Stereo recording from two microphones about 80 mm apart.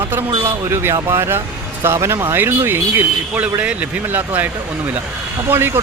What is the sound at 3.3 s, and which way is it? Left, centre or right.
Speech, centre.